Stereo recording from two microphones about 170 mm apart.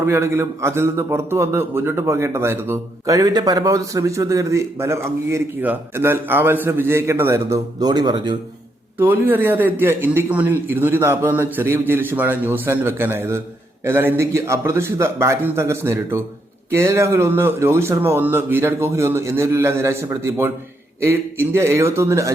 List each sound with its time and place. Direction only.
0.0 s a man's voice: 15° right (ahead or behind)
9.0 s a man's voice: 10° right (ahead or behind)